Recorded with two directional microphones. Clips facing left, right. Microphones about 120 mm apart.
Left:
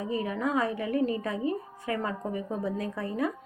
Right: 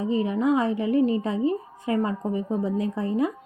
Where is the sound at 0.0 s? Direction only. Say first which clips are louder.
Right 6 dB; 25° right (ahead or behind).